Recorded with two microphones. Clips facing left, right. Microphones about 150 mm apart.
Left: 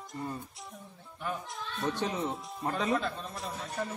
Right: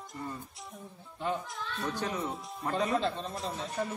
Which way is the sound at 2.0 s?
25° left (ahead or behind).